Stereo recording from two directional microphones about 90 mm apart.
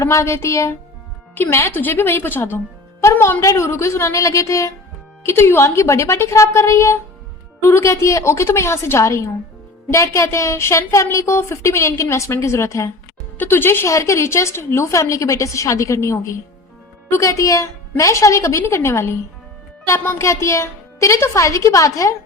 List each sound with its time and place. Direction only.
0.0 s a woman's voice: 30° left (ahead or behind)
3.0 s music: 30° left (ahead or behind)
3.4 s a woman's voice: 30° left (ahead or behind)